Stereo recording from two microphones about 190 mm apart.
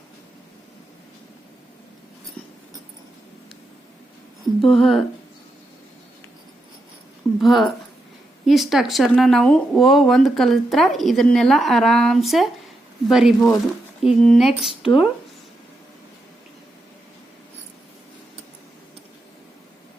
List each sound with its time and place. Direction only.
4.6 s speech: centre (ahead or behind)
7.3 s speech: centre (ahead or behind)
14.7 s speech: 30° left (ahead or behind)